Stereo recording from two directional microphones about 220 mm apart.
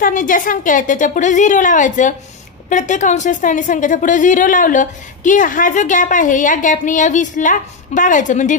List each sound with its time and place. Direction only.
0.0 s a woman's voice: 40° left (ahead or behind)